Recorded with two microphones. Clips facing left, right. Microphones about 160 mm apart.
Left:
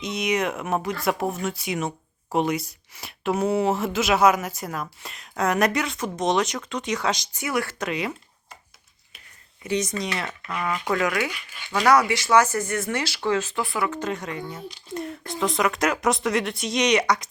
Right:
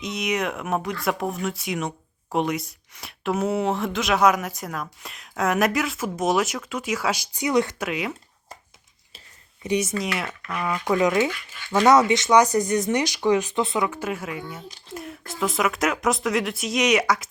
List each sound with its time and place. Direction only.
0.0 s speech: centre (ahead or behind); by 7.8 s 20° right (ahead or behind)
7.8 s speech: 5° right (ahead or behind)
9.6 s speech: 10° right (ahead or behind)
10.2 s speech: 20° left (ahead or behind)
10.7 s speech: 15° right (ahead or behind)
11.3 s speech: 15° left (ahead or behind)
11.7 s speech: 20° right (ahead or behind); by 17.2 s 5° right (ahead or behind)